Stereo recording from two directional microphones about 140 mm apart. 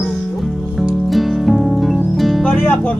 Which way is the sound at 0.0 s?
Centre (ahead or behind).